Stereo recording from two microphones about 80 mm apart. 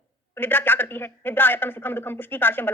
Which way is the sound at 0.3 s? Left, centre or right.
Left.